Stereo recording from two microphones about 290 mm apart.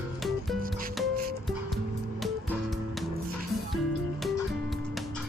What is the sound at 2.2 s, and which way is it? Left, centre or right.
Music, centre.